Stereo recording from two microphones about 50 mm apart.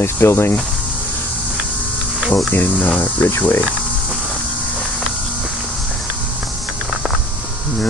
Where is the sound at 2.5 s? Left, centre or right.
Left.